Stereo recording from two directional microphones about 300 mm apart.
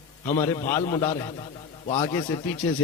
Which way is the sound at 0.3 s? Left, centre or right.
Centre.